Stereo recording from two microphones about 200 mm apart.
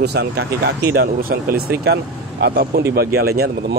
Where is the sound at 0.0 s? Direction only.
55° right (ahead or behind).